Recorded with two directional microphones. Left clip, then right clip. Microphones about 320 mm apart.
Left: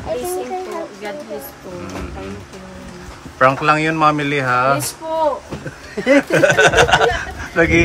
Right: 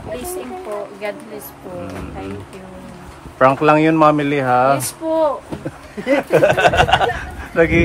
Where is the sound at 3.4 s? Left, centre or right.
Centre.